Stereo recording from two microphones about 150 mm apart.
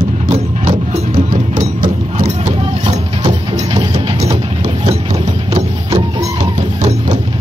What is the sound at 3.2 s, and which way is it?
Music, 30° right (ahead or behind).